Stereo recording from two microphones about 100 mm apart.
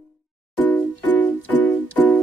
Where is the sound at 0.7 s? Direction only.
20° left (ahead or behind).